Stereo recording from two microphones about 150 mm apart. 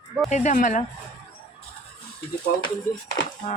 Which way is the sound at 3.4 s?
40° left (ahead or behind).